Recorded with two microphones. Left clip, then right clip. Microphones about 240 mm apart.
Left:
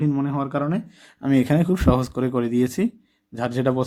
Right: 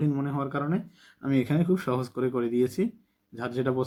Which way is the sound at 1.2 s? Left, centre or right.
Left.